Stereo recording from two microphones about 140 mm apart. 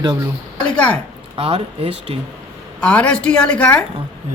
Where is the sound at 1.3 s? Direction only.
45° right (ahead or behind).